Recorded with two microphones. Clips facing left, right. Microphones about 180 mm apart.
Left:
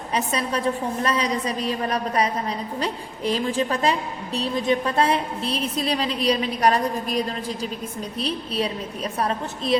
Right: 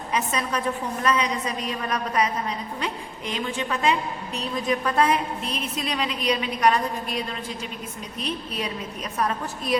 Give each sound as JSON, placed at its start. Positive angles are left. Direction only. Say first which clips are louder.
{"t": 0.1, "sound": "a woman's voice", "louder": "left 2 dB", "side_deg": 30}